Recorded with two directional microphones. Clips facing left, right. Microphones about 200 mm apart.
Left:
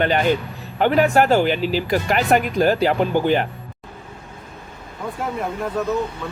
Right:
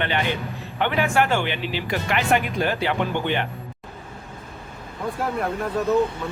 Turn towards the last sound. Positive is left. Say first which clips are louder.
# left 1 dB
turn(degrees=0)  # may be behind; listen again after turning